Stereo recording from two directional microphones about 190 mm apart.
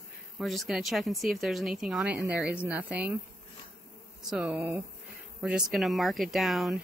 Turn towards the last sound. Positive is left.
turn(degrees=0)  # may be behind; listen again after turning